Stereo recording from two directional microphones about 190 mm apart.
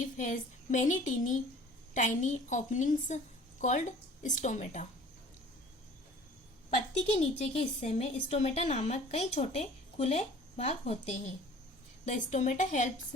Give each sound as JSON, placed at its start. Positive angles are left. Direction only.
{"t": 0.0, "sound": "a woman's voice", "side_deg": 40}
{"t": 7.0, "sound": "a woman's voice", "side_deg": 30}